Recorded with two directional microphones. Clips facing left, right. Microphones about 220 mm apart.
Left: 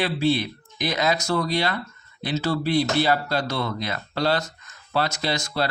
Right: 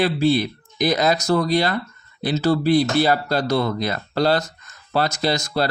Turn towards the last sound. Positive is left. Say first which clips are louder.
# right 5 dB
turn(degrees=-40)  # may be behind; listen again after turning